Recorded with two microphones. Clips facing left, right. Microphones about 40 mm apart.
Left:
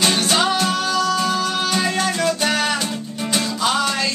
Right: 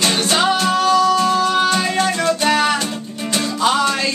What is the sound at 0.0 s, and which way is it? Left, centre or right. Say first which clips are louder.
Music: right 1 dB; centre.